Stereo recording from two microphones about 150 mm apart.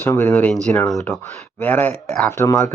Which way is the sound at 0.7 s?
Centre (ahead or behind).